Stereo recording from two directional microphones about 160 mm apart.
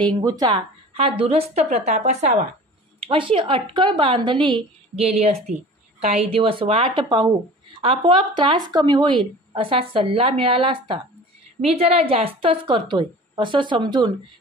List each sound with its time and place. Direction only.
0.2 s a woman's voice: 25° right (ahead or behind); by 2.4 s 45° right (ahead or behind)
3.0 s a woman's voice: 35° right (ahead or behind)